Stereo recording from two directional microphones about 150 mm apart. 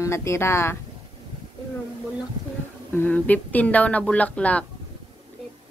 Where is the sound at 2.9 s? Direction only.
10° left (ahead or behind).